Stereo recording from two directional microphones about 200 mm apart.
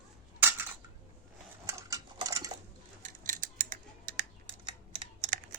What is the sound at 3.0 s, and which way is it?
Scissors, 40° right (ahead or behind).